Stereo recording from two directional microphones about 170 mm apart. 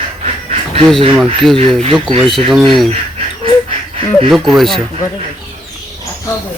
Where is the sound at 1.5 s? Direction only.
35° right (ahead or behind).